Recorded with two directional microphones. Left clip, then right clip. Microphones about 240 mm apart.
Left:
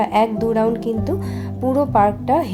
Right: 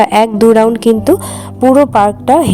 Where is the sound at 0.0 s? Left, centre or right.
Right.